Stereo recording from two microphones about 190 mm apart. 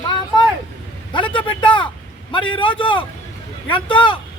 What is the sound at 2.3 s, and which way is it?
A man's voice, 25° left (ahead or behind).